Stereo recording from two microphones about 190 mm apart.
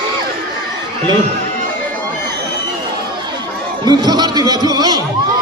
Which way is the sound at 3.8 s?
20° right (ahead or behind).